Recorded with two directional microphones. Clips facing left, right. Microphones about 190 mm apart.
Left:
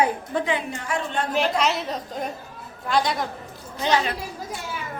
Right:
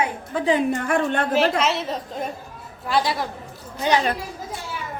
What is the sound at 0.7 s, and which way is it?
Speech, 55° right (ahead or behind).